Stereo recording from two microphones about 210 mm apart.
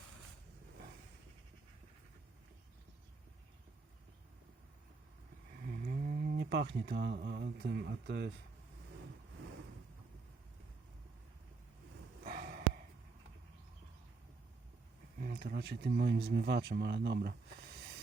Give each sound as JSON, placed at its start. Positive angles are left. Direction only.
{"t": 5.5, "sound": "speech", "side_deg": -40}
{"t": 12.2, "sound": "snort", "side_deg": -40}
{"t": 15.2, "sound": "speech", "side_deg": -50}